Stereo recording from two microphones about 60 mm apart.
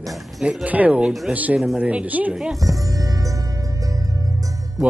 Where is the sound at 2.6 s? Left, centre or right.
Right.